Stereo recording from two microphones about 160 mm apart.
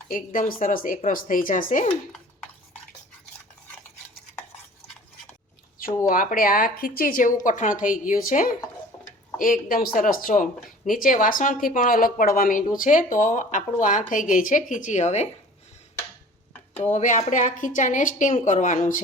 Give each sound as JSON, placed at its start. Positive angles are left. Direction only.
{"t": 0.1, "sound": "speech", "side_deg": 60}
{"t": 6.1, "sound": "a woman's voice", "side_deg": 60}
{"t": 16.7, "sound": "a woman's voice", "side_deg": 50}